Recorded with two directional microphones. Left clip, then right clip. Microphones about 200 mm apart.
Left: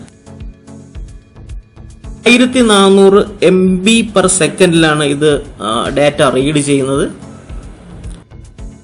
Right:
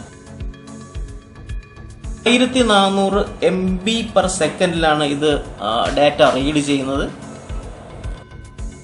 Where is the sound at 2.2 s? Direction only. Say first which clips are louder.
Left 6 dB; 40° left (ahead or behind).